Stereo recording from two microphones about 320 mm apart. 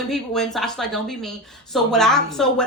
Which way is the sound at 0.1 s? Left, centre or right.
Centre.